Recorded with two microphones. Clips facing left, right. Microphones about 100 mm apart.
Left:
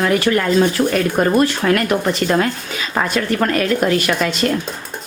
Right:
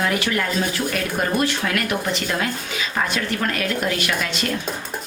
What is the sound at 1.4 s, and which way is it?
Speech, 40° left (ahead or behind).